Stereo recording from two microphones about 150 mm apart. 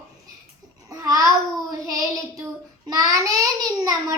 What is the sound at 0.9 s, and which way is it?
Child singing, 25° right (ahead or behind).